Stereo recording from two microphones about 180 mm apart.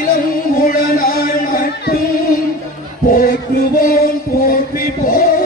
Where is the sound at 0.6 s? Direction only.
50° left (ahead or behind).